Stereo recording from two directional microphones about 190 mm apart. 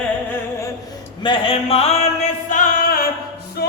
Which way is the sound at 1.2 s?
25° left (ahead or behind).